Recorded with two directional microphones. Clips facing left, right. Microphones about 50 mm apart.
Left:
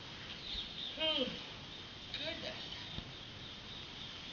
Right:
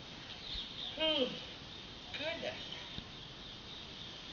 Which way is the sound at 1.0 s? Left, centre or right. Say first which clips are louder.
Right 3 dB; centre.